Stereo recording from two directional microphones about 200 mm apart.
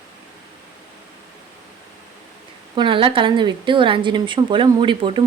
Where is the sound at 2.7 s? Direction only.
25° right (ahead or behind).